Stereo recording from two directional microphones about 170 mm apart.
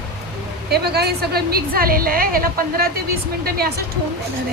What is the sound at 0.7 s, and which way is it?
A woman's voice, 70° right (ahead or behind).